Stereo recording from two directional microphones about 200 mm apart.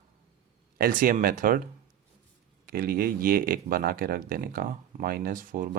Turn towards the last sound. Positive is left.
turn(degrees=-45)  # may be behind; listen again after turning